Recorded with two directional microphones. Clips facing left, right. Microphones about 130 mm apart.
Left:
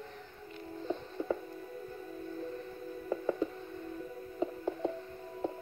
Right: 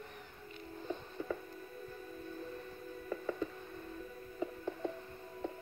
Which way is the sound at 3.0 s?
20° left (ahead or behind).